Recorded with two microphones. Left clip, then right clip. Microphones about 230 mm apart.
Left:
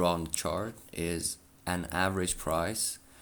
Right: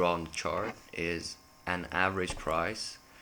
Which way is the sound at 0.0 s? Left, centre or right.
Left.